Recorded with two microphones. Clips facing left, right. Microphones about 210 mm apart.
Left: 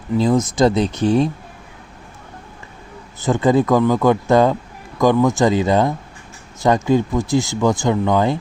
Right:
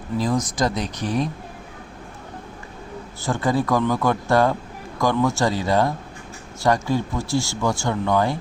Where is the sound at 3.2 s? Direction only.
20° left (ahead or behind).